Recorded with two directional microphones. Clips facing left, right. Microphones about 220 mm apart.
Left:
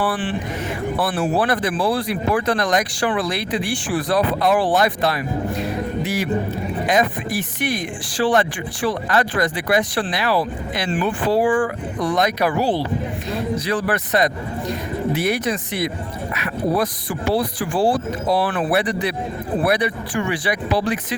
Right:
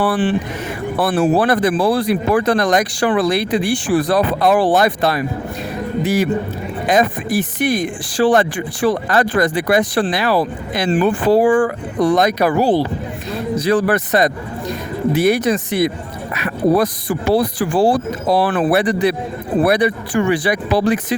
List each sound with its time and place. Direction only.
0.0 s speech: 40° right (ahead or behind)
6.9 s speech: 45° right (ahead or behind)